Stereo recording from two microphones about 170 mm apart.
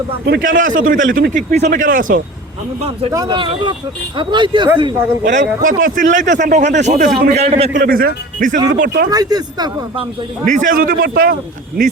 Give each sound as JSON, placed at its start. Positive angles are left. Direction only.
{"t": 0.3, "sound": "speech", "side_deg": -55}
{"t": 3.1, "sound": "speech", "side_deg": -25}
{"t": 5.2, "sound": "a man's voice", "side_deg": -50}
{"t": 7.7, "sound": "speech", "side_deg": -55}
{"t": 9.0, "sound": "speech", "side_deg": -20}
{"t": 10.4, "sound": "speech", "side_deg": -45}